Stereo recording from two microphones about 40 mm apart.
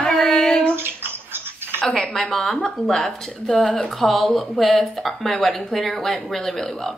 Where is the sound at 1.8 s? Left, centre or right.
Centre.